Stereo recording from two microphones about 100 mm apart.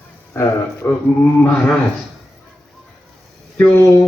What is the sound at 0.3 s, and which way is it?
Speech, 25° left (ahead or behind).